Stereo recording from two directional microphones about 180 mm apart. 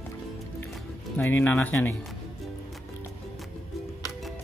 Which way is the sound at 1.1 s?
10° left (ahead or behind).